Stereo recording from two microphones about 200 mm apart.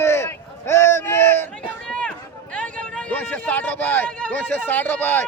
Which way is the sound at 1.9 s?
5° left (ahead or behind).